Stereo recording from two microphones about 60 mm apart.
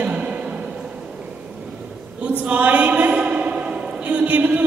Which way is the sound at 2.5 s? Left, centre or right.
Right.